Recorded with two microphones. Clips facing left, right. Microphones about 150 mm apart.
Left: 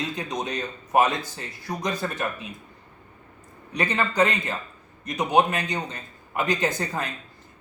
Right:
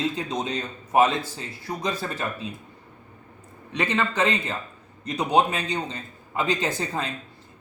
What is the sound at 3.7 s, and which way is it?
A man's voice, 25° right (ahead or behind).